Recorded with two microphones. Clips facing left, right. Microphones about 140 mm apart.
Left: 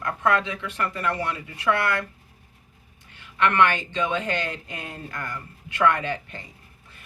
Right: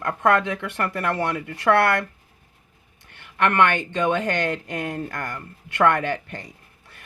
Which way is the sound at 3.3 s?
55° right (ahead or behind).